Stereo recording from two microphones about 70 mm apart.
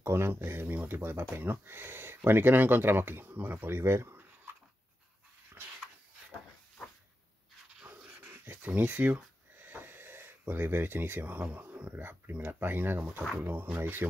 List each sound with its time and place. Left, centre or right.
0.0 s speech: right
8.2 s speech: right